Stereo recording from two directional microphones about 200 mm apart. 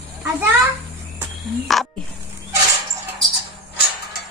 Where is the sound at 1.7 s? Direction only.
Centre (ahead or behind).